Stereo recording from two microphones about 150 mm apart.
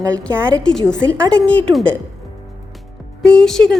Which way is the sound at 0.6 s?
5° left (ahead or behind).